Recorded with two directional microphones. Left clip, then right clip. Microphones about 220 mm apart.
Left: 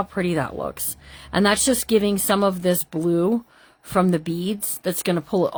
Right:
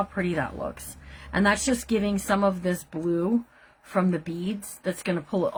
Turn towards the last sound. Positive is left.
turn(degrees=45)  # may be behind; listen again after turning